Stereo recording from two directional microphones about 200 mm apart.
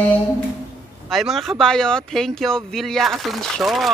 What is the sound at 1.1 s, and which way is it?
Speech, centre (ahead or behind).